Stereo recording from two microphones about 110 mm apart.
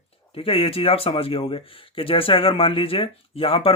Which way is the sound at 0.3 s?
60° left (ahead or behind).